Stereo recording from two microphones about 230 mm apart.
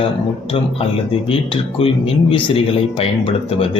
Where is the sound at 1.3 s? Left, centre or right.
Left.